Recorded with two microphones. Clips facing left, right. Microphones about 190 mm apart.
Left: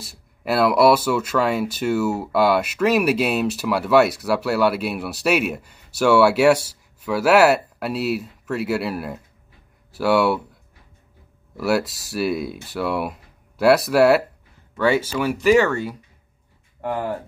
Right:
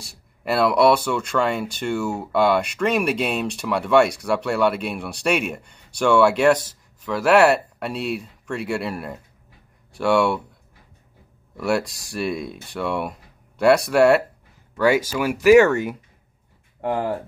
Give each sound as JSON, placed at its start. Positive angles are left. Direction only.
{"t": 0.0, "sound": "speech", "side_deg": 0}
{"t": 11.5, "sound": "speech", "side_deg": 5}
{"t": 14.8, "sound": "speech", "side_deg": -10}